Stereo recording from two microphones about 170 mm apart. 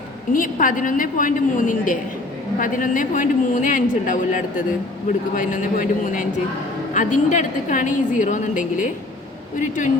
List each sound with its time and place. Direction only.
0.3 s a man's voice: 50° left (ahead or behind)